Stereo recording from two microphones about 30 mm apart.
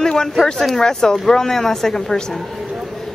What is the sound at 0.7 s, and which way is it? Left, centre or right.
Speech, left.